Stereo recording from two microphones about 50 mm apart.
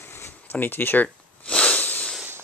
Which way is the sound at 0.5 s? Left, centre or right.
Left.